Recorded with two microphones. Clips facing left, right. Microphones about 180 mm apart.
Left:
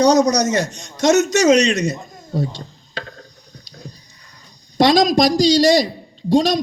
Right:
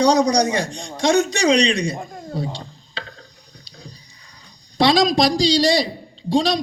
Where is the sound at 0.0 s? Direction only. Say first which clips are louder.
Left 2 dB; 45° left (ahead or behind).